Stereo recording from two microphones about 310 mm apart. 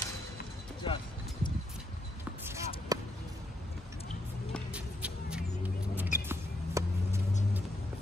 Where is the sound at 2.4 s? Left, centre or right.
Centre.